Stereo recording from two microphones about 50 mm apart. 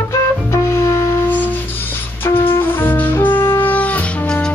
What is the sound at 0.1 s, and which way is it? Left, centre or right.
Music, left.